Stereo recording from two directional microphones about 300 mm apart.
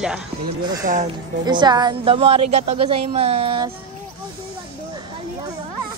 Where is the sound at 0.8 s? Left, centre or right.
Right.